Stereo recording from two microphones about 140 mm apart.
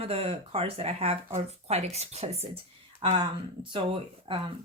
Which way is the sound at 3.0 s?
35° right (ahead or behind).